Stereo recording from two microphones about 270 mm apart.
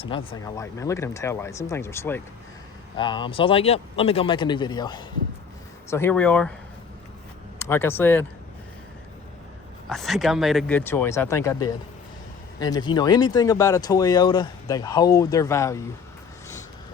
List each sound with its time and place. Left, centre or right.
0.0 s speech: centre
7.6 s speech: centre
9.9 s speech: centre